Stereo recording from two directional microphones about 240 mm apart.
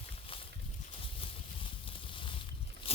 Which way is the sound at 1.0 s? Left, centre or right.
Left.